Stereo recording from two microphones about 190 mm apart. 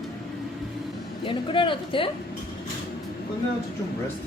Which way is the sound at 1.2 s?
25° left (ahead or behind).